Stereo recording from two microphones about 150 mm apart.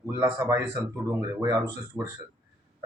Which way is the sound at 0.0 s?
20° right (ahead or behind).